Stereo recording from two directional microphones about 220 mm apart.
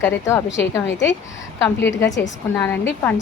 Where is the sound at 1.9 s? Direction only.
55° left (ahead or behind).